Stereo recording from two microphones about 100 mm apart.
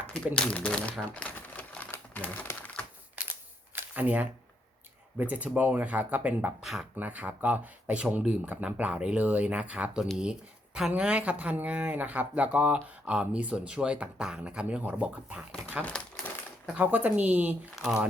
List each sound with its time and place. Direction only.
0.3 s speech: 10° left (ahead or behind)
1.1 s crumpling: 15° left (ahead or behind)
3.2 s camera: 15° right (ahead or behind)
3.8 s a sound: 15° right (ahead or behind)
5.1 s speech: 15° right (ahead or behind)
6.6 s speech: 5° right (ahead or behind)
6.9 s speech: 15° right (ahead or behind)
15.8 s crumpling: 10° left (ahead or behind)
16.7 s speech: 15° right (ahead or behind)